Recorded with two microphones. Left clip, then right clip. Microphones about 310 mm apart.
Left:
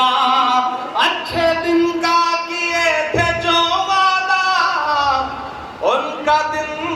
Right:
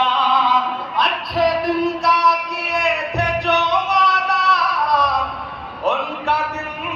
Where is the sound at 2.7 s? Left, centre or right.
Left.